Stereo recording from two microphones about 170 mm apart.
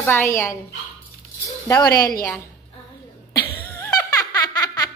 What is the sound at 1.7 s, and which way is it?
Speech, 20° left (ahead or behind).